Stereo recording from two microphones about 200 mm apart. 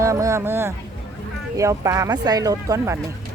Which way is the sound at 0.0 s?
15° right (ahead or behind).